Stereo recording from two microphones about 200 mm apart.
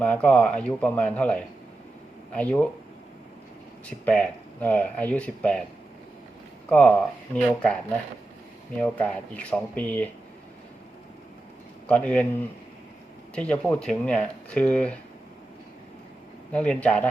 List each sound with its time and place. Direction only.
0.0 s speech: 5° left (ahead or behind)
3.8 s speech: 5° left (ahead or behind)
6.7 s speech: 5° left (ahead or behind)
8.8 s speech: 5° left (ahead or behind)
11.9 s speech: 5° left (ahead or behind)
16.5 s speech: 5° left (ahead or behind)